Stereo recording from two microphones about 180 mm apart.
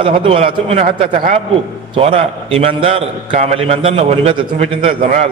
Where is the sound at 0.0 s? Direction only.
30° right (ahead or behind).